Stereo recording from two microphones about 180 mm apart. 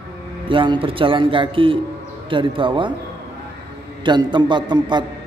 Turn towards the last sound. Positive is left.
turn(degrees=-25)  # may be behind; listen again after turning